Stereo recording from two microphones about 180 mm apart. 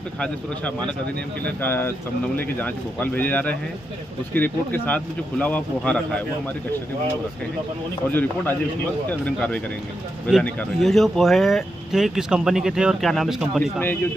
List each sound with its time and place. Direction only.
0.2 s speech: 5° left (ahead or behind)
8.1 s speech: 10° left (ahead or behind)